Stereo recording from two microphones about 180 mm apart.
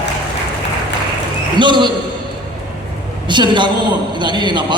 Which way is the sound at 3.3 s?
25° right (ahead or behind).